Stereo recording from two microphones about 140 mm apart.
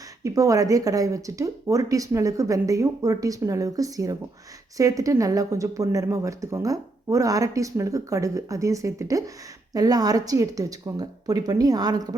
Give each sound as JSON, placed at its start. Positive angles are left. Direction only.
{"t": 0.2, "sound": "speech", "side_deg": -25}